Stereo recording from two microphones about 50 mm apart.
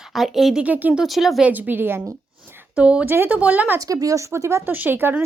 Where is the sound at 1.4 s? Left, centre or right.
Right.